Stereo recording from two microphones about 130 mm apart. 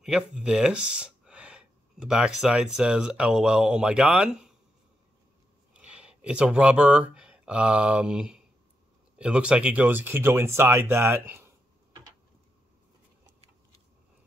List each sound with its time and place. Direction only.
0.0 s speech: 5° right (ahead or behind)
5.7 s speech: 10° right (ahead or behind)